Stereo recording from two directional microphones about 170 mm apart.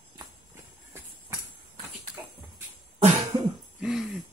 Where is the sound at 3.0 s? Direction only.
40° right (ahead or behind).